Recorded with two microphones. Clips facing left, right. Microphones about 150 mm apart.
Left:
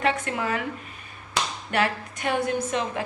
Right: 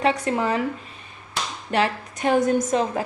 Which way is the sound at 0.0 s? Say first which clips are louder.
Right 4 dB; 35° right (ahead or behind).